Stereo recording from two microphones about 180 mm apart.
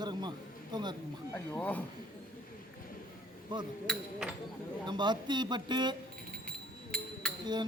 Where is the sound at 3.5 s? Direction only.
25° right (ahead or behind).